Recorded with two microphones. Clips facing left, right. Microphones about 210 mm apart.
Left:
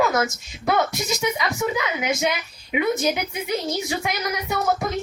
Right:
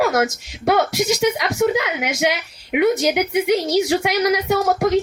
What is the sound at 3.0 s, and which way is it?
A woman's voice, 75° right (ahead or behind).